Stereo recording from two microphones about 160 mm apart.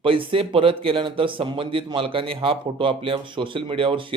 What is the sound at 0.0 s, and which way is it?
A man's voice, 35° right (ahead or behind).